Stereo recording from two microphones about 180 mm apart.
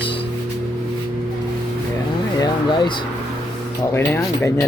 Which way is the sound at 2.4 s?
25° left (ahead or behind).